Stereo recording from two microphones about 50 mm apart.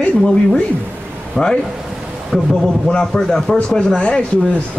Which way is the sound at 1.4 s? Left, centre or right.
Centre.